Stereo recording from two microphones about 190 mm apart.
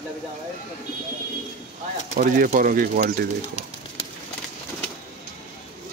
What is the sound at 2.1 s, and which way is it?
Speech, 45° right (ahead or behind).